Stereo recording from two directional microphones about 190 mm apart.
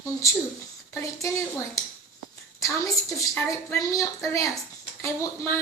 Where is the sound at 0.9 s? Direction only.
15° left (ahead or behind).